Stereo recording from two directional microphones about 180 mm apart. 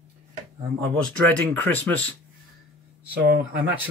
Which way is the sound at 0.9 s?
5° left (ahead or behind).